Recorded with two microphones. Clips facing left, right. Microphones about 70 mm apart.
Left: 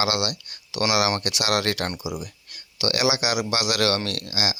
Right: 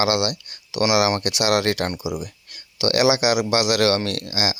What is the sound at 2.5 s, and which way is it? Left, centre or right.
Speech, right.